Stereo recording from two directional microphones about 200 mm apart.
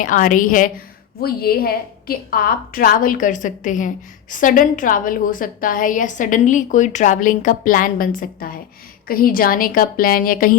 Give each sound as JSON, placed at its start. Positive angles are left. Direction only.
{"t": 0.0, "sound": "a woman's voice", "side_deg": 40}